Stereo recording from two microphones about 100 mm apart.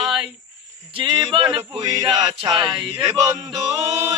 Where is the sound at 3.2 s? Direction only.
35° right (ahead or behind).